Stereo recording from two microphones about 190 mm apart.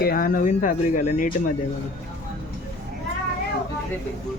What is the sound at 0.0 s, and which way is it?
Speech, 50° left (ahead or behind).